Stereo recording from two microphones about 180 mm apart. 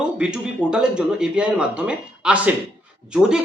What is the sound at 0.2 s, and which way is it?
A man's voice, 5° right (ahead or behind).